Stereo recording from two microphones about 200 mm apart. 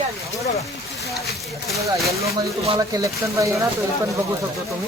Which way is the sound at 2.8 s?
15° right (ahead or behind).